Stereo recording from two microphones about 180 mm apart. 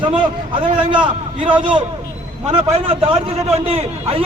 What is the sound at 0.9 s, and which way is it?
Speech, 25° right (ahead or behind).